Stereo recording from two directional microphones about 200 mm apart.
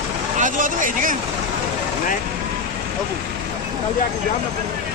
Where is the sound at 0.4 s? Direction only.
40° right (ahead or behind).